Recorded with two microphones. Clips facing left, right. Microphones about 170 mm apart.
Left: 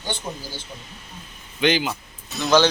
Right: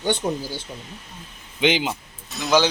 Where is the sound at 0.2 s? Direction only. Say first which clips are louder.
Right 8 dB; 65° right (ahead or behind).